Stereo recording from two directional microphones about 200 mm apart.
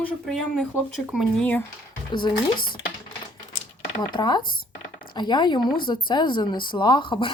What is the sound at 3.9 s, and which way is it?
Speech, 20° left (ahead or behind).